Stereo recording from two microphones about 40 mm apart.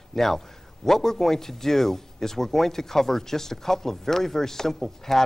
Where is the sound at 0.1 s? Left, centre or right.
Centre.